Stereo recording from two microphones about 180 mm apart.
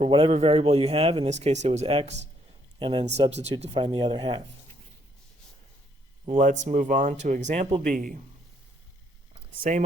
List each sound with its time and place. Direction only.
0.0 s speech: 30° right (ahead or behind)
2.7 s speech: 25° right (ahead or behind)
3.2 s speech: 35° right (ahead or behind)
6.2 s speech: 45° right (ahead or behind)